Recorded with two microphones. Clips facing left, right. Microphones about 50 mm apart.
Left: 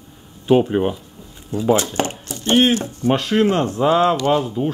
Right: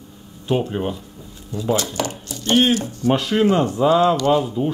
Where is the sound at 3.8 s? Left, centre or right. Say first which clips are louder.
Left 1 dB; centre.